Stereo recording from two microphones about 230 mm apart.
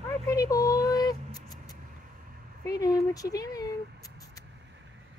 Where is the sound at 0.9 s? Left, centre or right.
Centre.